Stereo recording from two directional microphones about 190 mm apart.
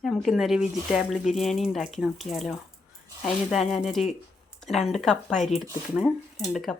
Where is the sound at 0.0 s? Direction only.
Centre (ahead or behind).